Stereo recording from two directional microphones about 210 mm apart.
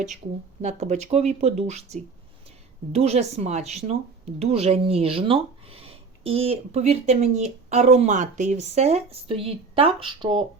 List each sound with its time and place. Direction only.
0.6 s speech: 35° right (ahead or behind)